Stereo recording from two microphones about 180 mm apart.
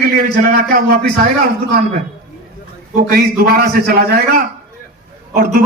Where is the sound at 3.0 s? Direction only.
55° right (ahead or behind).